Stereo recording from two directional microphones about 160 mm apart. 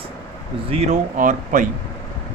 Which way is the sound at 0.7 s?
45° right (ahead or behind).